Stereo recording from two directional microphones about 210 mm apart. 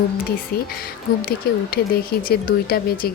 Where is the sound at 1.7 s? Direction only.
45° left (ahead or behind).